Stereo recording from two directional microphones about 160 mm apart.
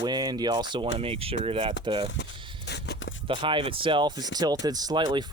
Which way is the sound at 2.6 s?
90° left.